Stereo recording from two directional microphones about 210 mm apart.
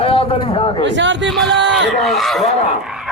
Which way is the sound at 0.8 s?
60° right (ahead or behind).